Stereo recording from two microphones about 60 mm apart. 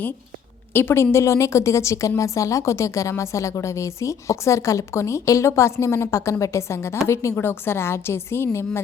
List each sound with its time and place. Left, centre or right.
0.7 s a woman's voice: left
1.1 s a woman's voice: left
7.3 s a woman's voice: left